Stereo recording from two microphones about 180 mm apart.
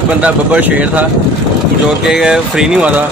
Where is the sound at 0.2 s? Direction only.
10° right (ahead or behind).